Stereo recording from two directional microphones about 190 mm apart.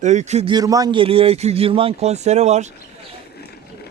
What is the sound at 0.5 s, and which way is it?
A man's voice, 20° right (ahead or behind).